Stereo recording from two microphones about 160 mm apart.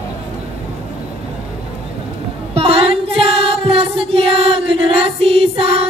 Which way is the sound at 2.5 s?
35° right (ahead or behind).